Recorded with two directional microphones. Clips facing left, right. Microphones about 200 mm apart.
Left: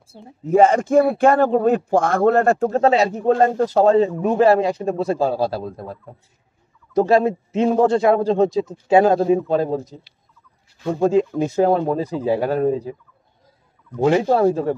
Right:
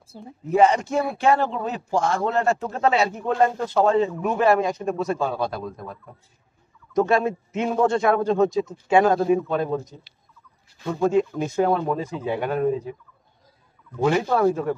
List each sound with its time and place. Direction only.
0.5 s a man's voice: 45° left (ahead or behind)
2.7 s a man's voice: 35° left (ahead or behind)
13.9 s a man's voice: 25° left (ahead or behind)